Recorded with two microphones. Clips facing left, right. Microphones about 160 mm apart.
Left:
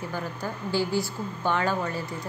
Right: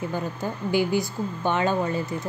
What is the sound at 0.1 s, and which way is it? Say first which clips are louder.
A woman's voice: right 3 dB; 20° right (ahead or behind).